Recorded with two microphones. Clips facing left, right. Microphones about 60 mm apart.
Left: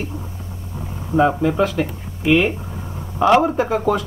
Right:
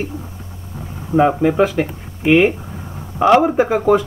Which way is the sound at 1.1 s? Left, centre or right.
Right.